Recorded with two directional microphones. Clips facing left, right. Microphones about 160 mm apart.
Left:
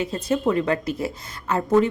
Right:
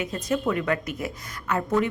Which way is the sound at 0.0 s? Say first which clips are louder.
Left 3 dB; 30° left (ahead or behind).